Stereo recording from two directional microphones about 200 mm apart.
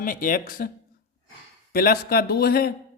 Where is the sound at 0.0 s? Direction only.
45° left (ahead or behind).